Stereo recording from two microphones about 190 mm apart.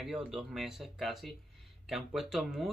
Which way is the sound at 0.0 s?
5° right (ahead or behind).